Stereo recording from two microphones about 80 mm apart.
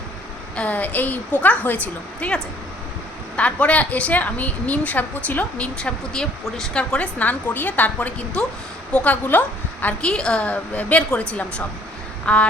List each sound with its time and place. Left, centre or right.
0.5 s a woman's voice: centre
12.2 s duck: centre